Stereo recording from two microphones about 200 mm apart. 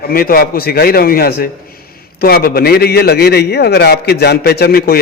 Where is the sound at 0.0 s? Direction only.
50° left (ahead or behind).